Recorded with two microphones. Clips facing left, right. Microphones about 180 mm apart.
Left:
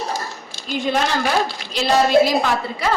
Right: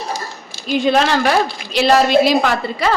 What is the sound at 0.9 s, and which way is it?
A woman's voice, 75° right (ahead or behind).